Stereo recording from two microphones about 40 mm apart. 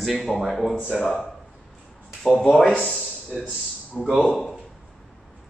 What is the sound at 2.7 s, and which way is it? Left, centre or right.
Speech, left.